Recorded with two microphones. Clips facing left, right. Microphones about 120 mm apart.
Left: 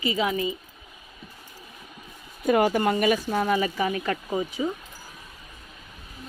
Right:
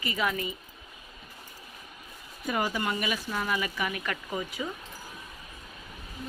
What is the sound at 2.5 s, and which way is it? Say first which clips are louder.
Speech: left 9 dB; 55° left (ahead or behind).